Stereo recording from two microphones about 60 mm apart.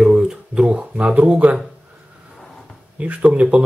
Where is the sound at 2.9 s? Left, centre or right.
Right.